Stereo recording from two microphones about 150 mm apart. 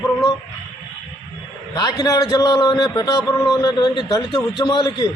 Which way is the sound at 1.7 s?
25° left (ahead or behind).